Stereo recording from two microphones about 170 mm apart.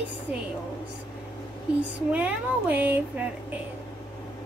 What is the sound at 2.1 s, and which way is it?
Speech, 10° right (ahead or behind).